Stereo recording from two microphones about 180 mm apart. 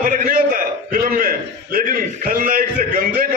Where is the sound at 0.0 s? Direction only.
50° right (ahead or behind).